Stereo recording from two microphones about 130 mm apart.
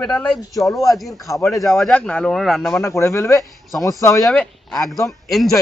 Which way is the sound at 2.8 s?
20° left (ahead or behind).